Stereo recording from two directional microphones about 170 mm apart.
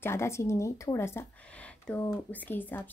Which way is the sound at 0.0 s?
15° left (ahead or behind).